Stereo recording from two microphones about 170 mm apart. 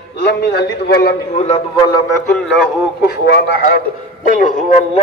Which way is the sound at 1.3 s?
40° left (ahead or behind).